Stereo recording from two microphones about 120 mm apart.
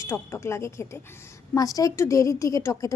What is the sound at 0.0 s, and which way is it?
A woman's voice, 20° left (ahead or behind).